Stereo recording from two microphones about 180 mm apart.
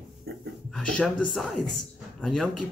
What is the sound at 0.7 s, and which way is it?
Speech, 5° left (ahead or behind).